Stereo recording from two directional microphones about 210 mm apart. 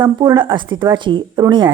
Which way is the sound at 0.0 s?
20° right (ahead or behind).